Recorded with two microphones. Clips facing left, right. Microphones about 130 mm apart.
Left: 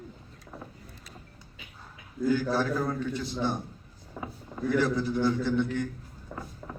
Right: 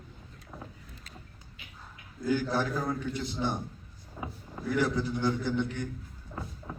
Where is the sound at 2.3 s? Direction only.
15° right (ahead or behind).